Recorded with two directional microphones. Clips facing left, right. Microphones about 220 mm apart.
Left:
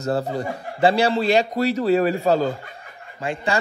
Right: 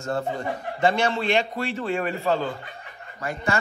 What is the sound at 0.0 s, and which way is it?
A man's voice, 35° left (ahead or behind).